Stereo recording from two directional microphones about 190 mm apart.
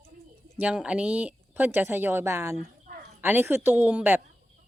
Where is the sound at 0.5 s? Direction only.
5° right (ahead or behind).